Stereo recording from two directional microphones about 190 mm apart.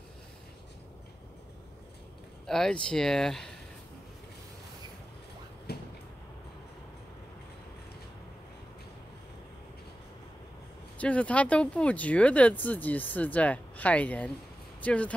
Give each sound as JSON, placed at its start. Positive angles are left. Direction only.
{"t": 2.4, "sound": "speech", "side_deg": 5}
{"t": 5.7, "sound": "a sound", "side_deg": 55}
{"t": 11.0, "sound": "speech", "side_deg": 5}